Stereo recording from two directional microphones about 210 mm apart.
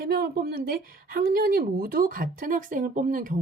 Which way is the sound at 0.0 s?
45° right (ahead or behind).